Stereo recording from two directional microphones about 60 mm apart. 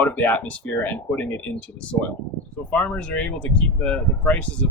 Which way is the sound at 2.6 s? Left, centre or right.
Left.